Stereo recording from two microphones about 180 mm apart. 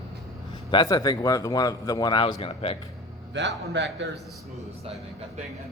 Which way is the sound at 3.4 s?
75° right (ahead or behind).